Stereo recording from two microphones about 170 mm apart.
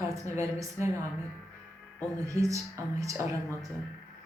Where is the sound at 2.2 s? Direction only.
20° right (ahead or behind).